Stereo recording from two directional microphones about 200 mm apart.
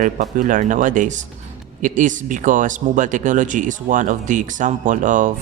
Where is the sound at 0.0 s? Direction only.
40° right (ahead or behind).